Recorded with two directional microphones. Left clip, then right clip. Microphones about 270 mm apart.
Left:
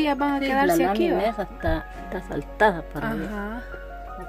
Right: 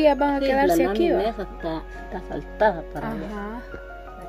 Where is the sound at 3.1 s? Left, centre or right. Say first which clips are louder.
Left 1 dB; centre.